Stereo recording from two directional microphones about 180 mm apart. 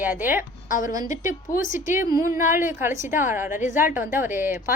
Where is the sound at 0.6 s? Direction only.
45° left (ahead or behind).